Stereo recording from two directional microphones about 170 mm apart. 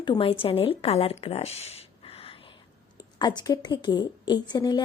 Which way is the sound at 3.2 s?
25° left (ahead or behind).